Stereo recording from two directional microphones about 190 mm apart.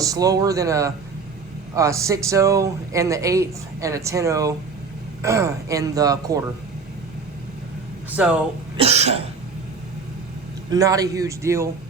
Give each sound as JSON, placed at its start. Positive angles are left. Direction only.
{"t": 0.0, "sound": "speech", "side_deg": -20}
{"t": 8.1, "sound": "speech", "side_deg": -5}
{"t": 8.8, "sound": "cough", "side_deg": -35}
{"t": 10.7, "sound": "speech", "side_deg": -20}